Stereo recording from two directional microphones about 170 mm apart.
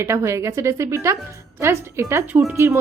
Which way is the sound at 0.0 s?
15° right (ahead or behind).